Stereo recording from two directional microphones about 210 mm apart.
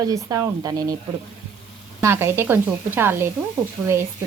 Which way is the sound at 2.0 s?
10° right (ahead or behind).